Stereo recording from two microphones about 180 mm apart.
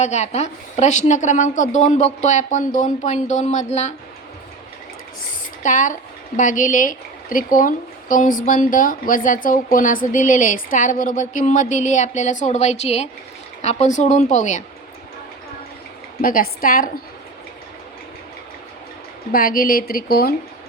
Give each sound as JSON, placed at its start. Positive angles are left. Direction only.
{"t": 0.0, "sound": "a woman's voice", "side_deg": 40}
{"t": 5.6, "sound": "a woman's voice", "side_deg": 45}
{"t": 16.2, "sound": "speech", "side_deg": 50}
{"t": 19.3, "sound": "speech", "side_deg": 50}